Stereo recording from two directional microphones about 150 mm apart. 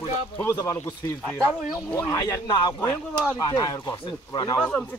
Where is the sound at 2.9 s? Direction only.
10° left (ahead or behind).